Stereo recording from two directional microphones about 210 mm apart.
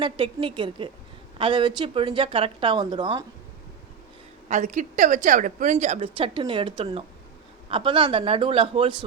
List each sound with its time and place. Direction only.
0.0 s a woman's voice: 25° right (ahead or behind)
4.4 s a woman's voice: 35° right (ahead or behind)